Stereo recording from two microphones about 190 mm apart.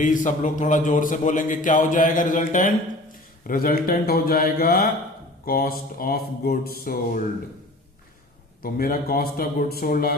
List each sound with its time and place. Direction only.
0.0 s a man's voice: 40° left (ahead or behind)
8.6 s a man's voice: 50° left (ahead or behind)